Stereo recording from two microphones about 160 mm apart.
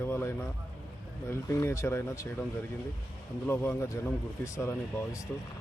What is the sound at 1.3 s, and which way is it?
Speech, 15° left (ahead or behind).